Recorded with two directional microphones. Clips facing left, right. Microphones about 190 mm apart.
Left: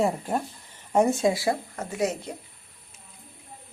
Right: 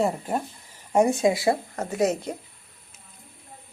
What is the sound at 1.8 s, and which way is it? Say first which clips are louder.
Speech: right 4 dB; 45° right (ahead or behind).